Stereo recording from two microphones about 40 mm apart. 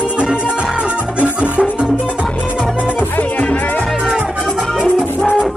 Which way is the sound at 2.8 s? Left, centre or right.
Left.